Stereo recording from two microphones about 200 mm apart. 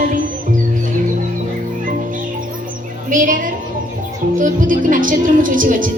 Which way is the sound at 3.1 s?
40° right (ahead or behind).